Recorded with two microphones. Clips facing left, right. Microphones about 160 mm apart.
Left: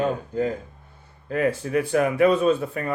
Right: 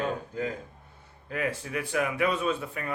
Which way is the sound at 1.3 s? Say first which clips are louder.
Left 8 dB; 40° left (ahead or behind).